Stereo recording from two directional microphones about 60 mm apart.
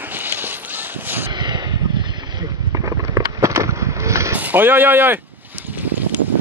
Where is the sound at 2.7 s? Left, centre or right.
Right.